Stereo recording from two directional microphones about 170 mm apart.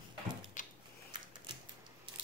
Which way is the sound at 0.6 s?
50° left (ahead or behind).